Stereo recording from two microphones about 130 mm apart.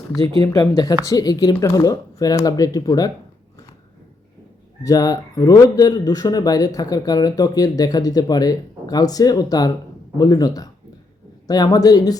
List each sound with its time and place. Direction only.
0.2 s speech: 30° left (ahead or behind)
4.8 s speech: 30° left (ahead or behind)